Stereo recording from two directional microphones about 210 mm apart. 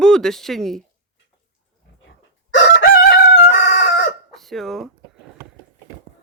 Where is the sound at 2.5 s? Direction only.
50° left (ahead or behind).